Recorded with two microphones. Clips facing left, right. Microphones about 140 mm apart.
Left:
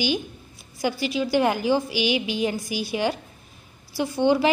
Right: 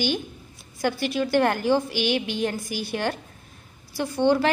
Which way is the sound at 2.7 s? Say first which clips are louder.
Left 2 dB; 50° right (ahead or behind).